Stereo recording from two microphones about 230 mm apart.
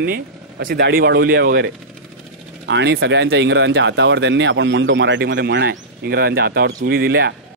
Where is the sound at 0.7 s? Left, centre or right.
Right.